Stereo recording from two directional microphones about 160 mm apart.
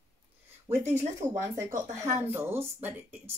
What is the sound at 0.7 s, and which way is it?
Speech, 15° right (ahead or behind).